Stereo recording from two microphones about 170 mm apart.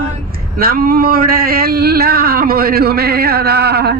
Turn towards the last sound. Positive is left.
turn(degrees=-75)  # may be behind; listen again after turning